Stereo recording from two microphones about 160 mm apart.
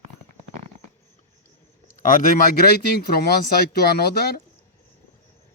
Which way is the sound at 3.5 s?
75° left (ahead or behind).